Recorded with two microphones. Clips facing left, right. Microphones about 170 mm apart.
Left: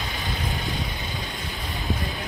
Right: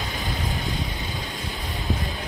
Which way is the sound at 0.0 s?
Centre (ahead or behind).